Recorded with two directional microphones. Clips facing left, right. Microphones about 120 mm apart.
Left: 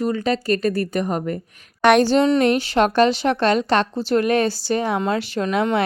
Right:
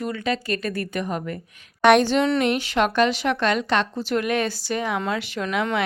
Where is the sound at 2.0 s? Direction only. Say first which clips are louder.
Left 4 dB; 35° left (ahead or behind).